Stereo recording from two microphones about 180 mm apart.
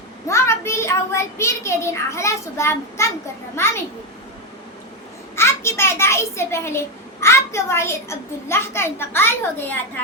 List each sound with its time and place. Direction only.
0.3 s a child's voice: 15° left (ahead or behind)
5.4 s a child's voice: 15° left (ahead or behind)